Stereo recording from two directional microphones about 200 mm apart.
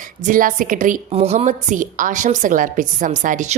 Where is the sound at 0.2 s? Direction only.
40° right (ahead or behind).